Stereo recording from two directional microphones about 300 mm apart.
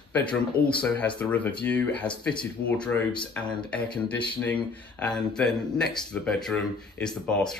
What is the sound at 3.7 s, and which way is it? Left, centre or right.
Speech, centre.